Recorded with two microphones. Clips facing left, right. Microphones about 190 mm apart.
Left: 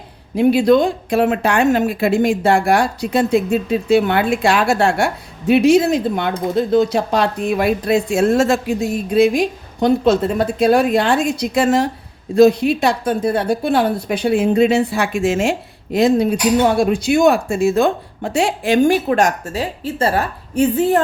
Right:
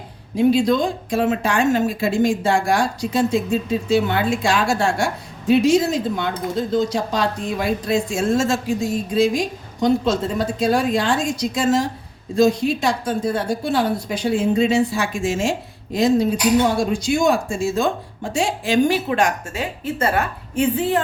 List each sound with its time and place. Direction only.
0.3 s speech: 60° left (ahead or behind); by 21.0 s 40° left (ahead or behind)